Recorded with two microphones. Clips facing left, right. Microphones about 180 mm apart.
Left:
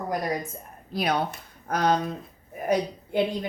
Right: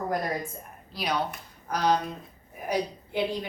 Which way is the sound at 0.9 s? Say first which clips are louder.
Left 4 dB; 55° left (ahead or behind).